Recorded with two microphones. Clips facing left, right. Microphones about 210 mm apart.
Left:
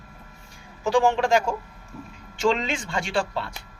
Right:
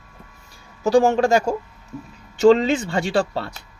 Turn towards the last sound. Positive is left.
turn(degrees=-40)  # may be behind; listen again after turning